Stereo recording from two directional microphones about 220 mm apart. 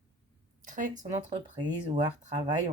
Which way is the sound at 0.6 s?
35° right (ahead or behind).